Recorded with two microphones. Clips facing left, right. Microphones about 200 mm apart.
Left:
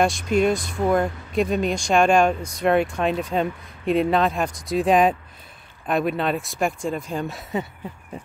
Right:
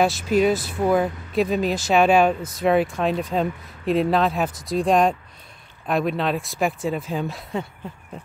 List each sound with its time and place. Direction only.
0.0 s speech: 5° right (ahead or behind)